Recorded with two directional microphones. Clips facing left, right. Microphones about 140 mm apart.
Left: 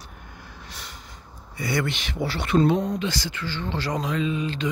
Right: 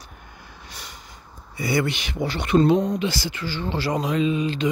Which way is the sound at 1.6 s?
5° right (ahead or behind).